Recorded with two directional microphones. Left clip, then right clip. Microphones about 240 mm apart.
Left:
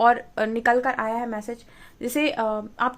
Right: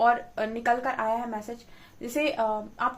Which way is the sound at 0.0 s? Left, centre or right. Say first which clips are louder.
Left 4 dB; left.